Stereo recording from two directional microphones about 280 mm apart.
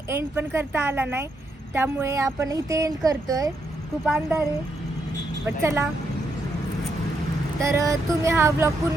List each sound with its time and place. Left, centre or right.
0.1 s a woman's voice: centre
5.6 s speech: centre
7.6 s speech: centre